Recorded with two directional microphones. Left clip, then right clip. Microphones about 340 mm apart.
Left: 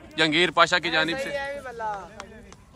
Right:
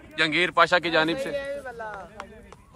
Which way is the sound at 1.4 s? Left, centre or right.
Left.